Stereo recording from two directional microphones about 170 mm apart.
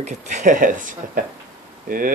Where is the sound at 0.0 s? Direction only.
45° right (ahead or behind).